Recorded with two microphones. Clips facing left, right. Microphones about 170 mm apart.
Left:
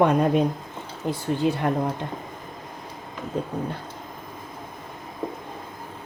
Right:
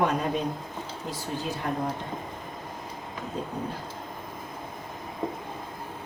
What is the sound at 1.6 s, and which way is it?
Speech, 60° left (ahead or behind).